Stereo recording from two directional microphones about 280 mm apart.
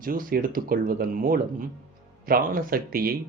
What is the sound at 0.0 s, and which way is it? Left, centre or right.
Speech, right.